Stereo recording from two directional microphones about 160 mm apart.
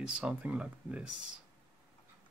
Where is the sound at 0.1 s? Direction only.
5° right (ahead or behind).